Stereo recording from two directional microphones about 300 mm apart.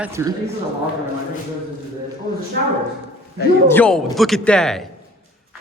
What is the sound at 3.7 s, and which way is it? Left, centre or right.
Speech, centre.